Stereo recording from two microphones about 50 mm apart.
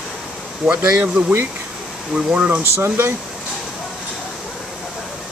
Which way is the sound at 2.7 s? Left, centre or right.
Right.